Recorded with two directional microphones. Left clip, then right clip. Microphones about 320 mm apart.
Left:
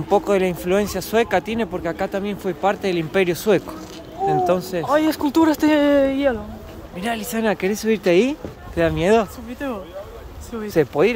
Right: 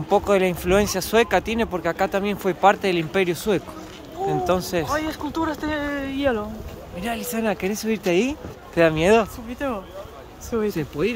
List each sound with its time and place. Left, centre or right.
0.1 s speech: centre
4.9 s speech: left
7.0 s speech: centre
10.7 s speech: centre